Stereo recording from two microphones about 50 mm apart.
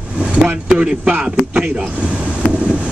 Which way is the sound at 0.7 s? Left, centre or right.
Centre.